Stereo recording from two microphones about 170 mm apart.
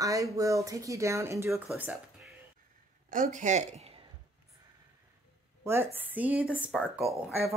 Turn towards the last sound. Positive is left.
turn(degrees=0)  # may be behind; listen again after turning